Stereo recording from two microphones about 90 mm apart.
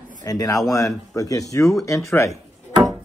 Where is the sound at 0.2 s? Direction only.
45° left (ahead or behind).